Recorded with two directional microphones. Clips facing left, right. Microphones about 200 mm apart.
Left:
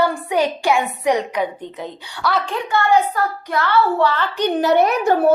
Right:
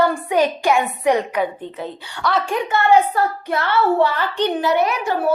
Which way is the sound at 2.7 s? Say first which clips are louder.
Right 1 dB; 25° right (ahead or behind).